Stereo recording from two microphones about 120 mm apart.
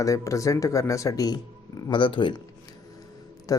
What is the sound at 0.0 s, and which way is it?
Speech, 25° left (ahead or behind).